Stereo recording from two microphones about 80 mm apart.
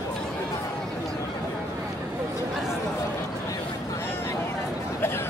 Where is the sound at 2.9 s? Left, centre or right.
Left.